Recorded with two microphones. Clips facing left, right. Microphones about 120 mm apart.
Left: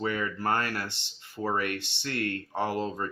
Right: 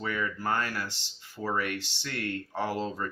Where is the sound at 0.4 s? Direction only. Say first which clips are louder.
Left 3 dB; 55° left (ahead or behind).